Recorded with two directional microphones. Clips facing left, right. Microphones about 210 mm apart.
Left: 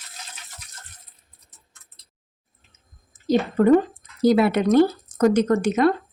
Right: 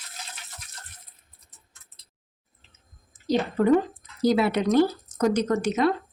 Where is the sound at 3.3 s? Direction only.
50° left (ahead or behind).